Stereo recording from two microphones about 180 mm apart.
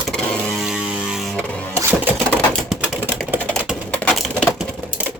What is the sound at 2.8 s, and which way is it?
Typing, 5° right (ahead or behind).